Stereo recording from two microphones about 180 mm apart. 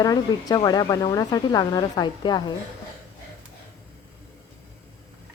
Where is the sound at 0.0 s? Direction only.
20° left (ahead or behind).